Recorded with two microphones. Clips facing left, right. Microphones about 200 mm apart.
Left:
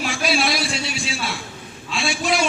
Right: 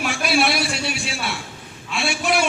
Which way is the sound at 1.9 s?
60° right (ahead or behind).